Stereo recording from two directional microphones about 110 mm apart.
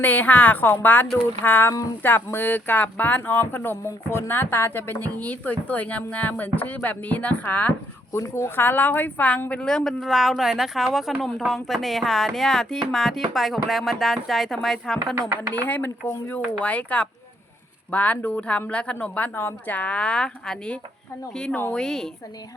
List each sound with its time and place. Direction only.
0.0 s speech: 15° left (ahead or behind)
8.1 s speech: 25° left (ahead or behind); by 15.3 s 5° left (ahead or behind)
15.6 s speech: 15° left (ahead or behind)